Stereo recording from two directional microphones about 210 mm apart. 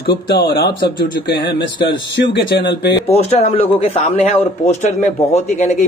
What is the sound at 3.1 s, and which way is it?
Speech, 30° left (ahead or behind).